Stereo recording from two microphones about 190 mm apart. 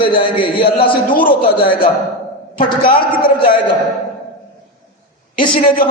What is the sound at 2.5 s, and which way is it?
Speech, 30° left (ahead or behind).